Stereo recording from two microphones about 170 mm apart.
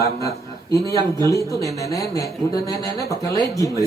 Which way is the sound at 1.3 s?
20° left (ahead or behind).